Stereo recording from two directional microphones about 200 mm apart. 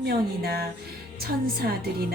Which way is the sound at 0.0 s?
50° right (ahead or behind).